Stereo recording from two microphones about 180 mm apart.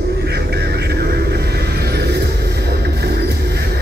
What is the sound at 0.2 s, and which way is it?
Vehicle, 65° right (ahead or behind).